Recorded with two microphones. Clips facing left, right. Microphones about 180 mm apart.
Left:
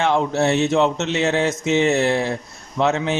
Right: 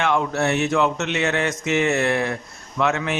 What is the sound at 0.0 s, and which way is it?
Mantra, 30° left (ahead or behind).